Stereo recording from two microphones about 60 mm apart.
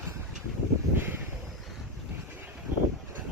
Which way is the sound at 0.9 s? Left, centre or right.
Right.